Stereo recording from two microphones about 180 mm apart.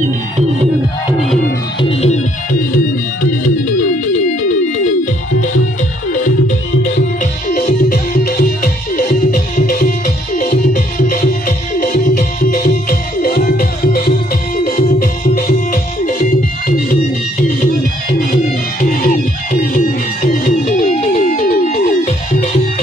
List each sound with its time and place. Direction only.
1.8 s organ: 35° left (ahead or behind)
2.7 s music: 50° left (ahead or behind)
6.1 s music: 45° left (ahead or behind)
18.3 s music: 50° left (ahead or behind)